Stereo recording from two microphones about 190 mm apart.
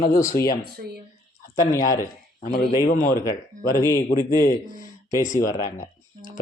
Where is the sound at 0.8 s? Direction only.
55° right (ahead or behind).